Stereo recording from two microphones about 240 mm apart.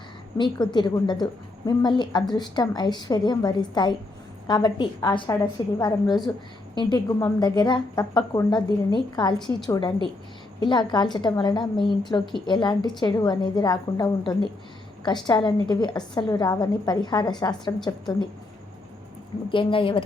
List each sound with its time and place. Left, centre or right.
0.3 s a woman's voice: centre
19.5 s a woman's voice: left